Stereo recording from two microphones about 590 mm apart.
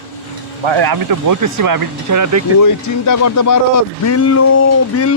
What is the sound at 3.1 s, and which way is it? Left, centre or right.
Speech, left.